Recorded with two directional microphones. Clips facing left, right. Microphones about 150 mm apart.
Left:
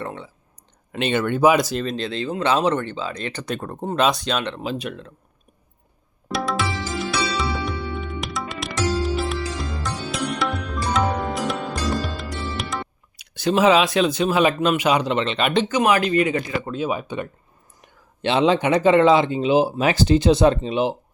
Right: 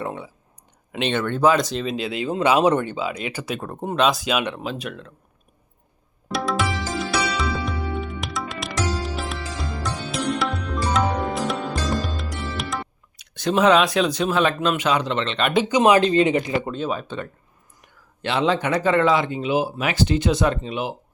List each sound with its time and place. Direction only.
0.0 s a sound: 15° right (ahead or behind)
0.9 s speech: 5° left (ahead or behind)
6.2 s music: centre (ahead or behind)
12.1 s speech: centre (ahead or behind)
15.8 s speech: 25° right (ahead or behind)
16.7 s speech: 10° left (ahead or behind); by 20.9 s 25° left (ahead or behind)